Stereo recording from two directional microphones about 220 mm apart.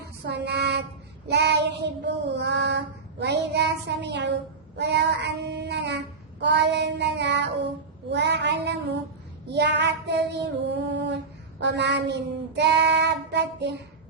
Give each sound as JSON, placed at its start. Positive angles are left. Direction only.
{"t": 0.0, "sound": "child singing", "side_deg": -50}